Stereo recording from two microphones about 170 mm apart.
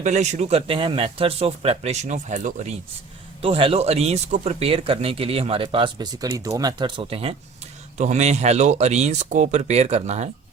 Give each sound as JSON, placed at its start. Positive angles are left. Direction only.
{"t": 0.0, "sound": "speech", "side_deg": -45}
{"t": 3.4, "sound": "speech", "side_deg": -35}